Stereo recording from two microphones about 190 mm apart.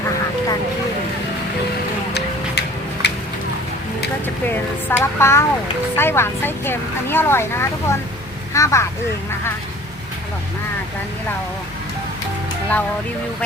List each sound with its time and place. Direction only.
2.1 s music: 65° left (ahead or behind)
4.4 s speech: 10° left (ahead or behind)